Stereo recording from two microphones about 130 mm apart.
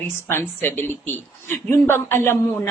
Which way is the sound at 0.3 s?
15° left (ahead or behind).